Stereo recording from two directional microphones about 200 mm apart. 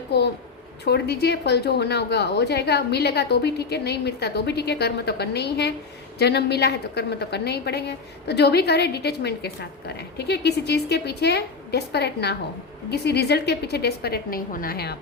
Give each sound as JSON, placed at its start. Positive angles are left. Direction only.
{"t": 0.9, "sound": "a woman's voice", "side_deg": 55}